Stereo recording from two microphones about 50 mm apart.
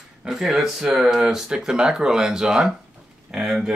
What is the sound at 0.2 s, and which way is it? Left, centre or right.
Speech, centre.